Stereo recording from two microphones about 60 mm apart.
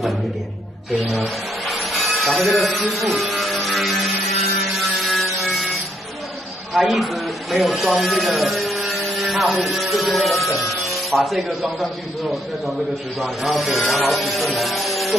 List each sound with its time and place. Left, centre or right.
1.1 s a sound: centre
6.7 s speech: centre
13.2 s speech: centre